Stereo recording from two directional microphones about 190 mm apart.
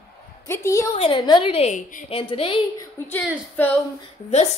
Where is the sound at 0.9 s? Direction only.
30° left (ahead or behind).